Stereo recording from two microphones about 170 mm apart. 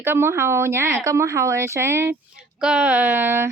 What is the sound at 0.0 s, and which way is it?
Speech, 15° right (ahead or behind).